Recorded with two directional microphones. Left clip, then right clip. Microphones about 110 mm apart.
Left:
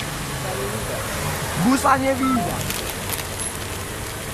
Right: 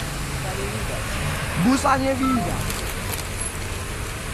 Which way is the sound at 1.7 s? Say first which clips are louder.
Left 3 dB; 30° right (ahead or behind).